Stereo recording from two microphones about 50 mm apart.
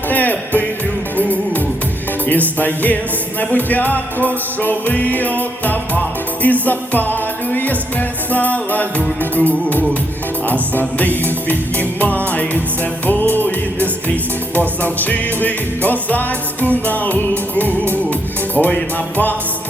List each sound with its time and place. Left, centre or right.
0.1 s music: left